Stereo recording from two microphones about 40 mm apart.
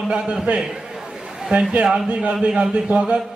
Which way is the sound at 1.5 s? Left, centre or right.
Right.